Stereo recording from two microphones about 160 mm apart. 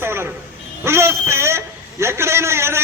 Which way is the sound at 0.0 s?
15° right (ahead or behind).